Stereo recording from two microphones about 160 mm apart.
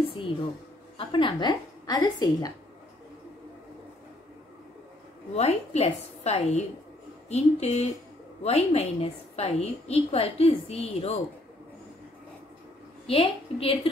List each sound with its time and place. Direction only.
0.9 s a woman's voice: 30° left (ahead or behind)
5.3 s a woman's voice: 45° left (ahead or behind)
13.0 s a woman's voice: 35° left (ahead or behind)